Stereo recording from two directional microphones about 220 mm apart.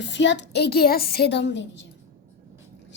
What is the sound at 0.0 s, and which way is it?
Speech, 55° left (ahead or behind).